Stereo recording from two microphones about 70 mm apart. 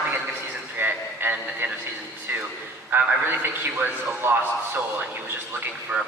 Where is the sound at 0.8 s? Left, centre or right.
Right.